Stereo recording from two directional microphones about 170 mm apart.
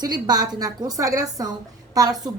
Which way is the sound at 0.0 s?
25° right (ahead or behind).